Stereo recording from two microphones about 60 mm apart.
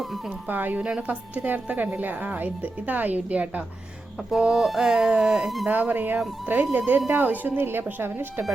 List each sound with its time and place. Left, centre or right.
0.5 s speech: right
0.8 s a woman's voice: centre
4.3 s speech: centre
5.7 s speech: right